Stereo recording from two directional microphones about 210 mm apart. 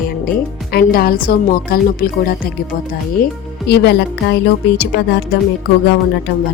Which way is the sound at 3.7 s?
50° left (ahead or behind).